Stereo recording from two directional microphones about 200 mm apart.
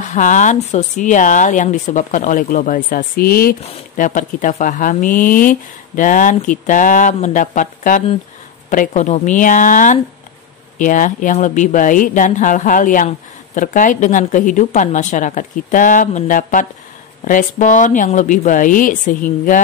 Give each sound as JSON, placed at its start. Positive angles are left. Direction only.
{"t": 0.0, "sound": "speech", "side_deg": 40}